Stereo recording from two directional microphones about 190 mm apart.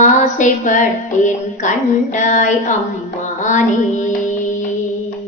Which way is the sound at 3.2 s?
40° left (ahead or behind).